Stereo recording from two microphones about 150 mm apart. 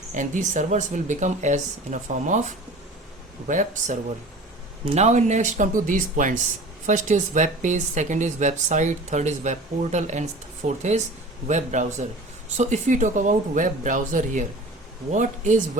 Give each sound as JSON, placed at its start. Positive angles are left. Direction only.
{"t": 0.1, "sound": "speech", "side_deg": -55}
{"t": 4.9, "sound": "speech", "side_deg": -50}